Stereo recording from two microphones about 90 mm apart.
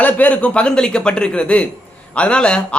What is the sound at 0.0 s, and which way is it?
A man's voice, 15° left (ahead or behind).